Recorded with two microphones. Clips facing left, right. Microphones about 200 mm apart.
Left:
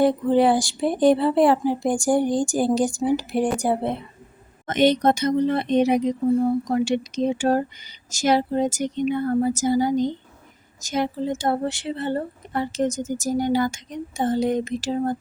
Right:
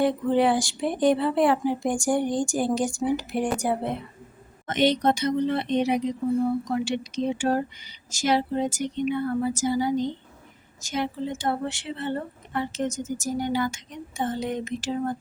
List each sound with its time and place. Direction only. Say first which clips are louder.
0.0 s a woman's voice: left 4 dB; 35° left (ahead or behind)
4.6 s a woman's voice: left 4 dB; 45° left (ahead or behind)